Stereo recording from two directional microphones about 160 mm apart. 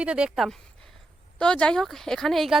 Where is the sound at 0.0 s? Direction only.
5° right (ahead or behind).